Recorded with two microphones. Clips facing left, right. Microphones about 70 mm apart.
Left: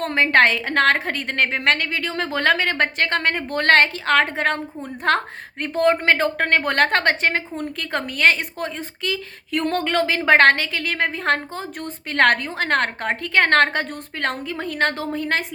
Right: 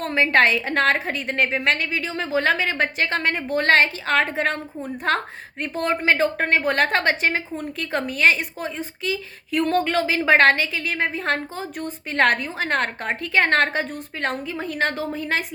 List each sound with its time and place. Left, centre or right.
0.0 s a woman's voice: left
11.2 s a woman's voice: left